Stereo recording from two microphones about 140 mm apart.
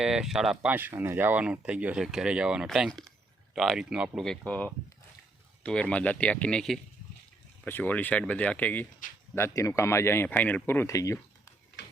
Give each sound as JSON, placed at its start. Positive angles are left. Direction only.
{"t": 0.0, "sound": "speech", "side_deg": -5}